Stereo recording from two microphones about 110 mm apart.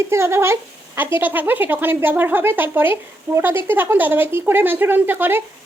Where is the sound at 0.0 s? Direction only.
25° right (ahead or behind).